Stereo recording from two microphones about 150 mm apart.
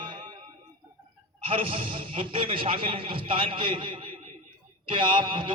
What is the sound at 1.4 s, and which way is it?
Speech, 40° right (ahead or behind).